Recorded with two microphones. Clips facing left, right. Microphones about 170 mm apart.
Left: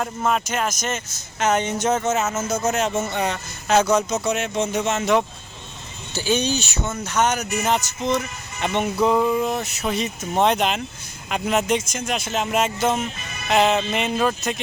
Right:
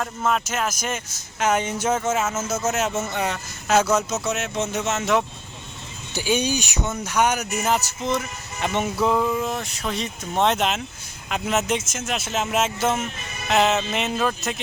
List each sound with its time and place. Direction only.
0.0 s speech: 5° left (ahead or behind)